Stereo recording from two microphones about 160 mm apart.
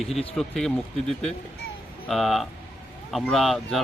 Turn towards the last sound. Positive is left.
turn(degrees=0)  # may be behind; listen again after turning